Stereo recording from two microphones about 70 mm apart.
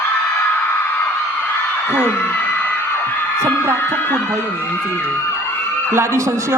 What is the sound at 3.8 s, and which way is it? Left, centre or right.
Music, left.